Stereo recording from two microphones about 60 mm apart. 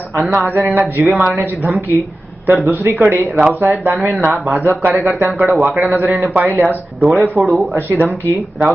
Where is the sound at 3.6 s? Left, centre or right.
Right.